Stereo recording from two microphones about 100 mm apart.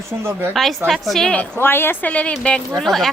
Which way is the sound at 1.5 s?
20° left (ahead or behind).